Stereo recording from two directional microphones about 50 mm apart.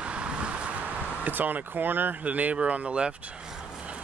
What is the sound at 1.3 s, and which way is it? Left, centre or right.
Speech, right.